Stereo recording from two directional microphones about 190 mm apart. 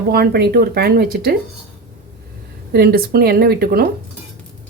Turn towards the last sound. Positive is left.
turn(degrees=-55)  # may be behind; listen again after turning